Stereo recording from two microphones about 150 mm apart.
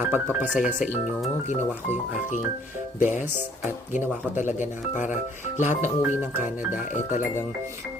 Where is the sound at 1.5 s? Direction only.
55° left (ahead or behind).